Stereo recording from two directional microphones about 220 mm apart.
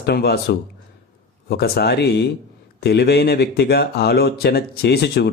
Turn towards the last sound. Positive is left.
turn(degrees=50)  # may be behind; listen again after turning